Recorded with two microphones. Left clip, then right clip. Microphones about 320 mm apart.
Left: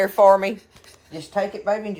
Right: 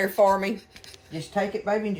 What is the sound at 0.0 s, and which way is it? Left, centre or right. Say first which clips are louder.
Speech: left 6 dB; centre.